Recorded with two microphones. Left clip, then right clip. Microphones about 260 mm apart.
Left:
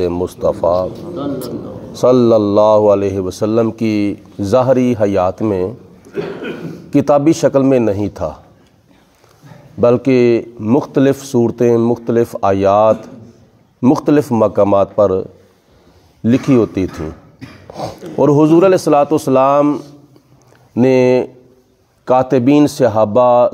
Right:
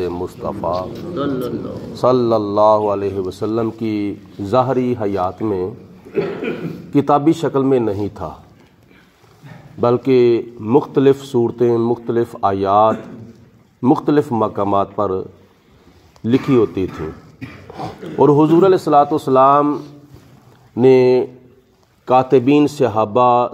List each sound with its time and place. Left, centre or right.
0.0 s a man's voice: left
2.0 s a man's voice: left
6.9 s a man's voice: left
9.8 s a man's voice: left
16.3 s a man's voice: left